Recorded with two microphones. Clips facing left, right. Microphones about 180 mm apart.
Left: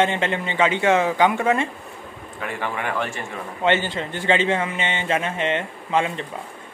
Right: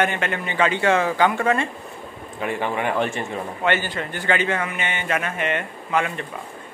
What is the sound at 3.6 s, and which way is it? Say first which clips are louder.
A man's voice: left 3 dB; 25° left (ahead or behind).